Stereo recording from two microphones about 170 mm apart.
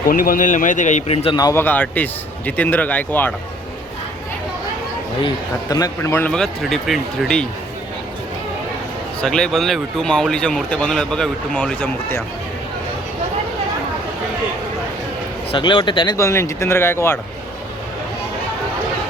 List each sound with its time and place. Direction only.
0.1 s speech: 55° left (ahead or behind); by 1.4 s 35° left (ahead or behind)
1.4 s speech: 20° left (ahead or behind)
1.6 s speech: 10° left (ahead or behind)
5.2 s speech: 20° left (ahead or behind); by 7.4 s centre (ahead or behind)
9.2 s speech: 5° left (ahead or behind)
15.5 s speech: 30° left (ahead or behind)